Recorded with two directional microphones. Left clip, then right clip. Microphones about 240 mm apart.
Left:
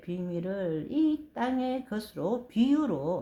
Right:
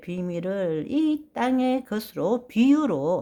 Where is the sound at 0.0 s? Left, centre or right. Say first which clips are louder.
Right 5 dB; right.